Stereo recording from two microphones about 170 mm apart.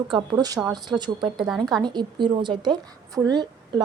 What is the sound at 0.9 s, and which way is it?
A woman's voice, 25° right (ahead or behind).